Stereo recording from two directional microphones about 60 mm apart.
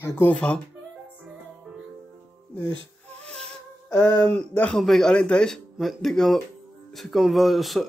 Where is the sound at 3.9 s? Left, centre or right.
Centre.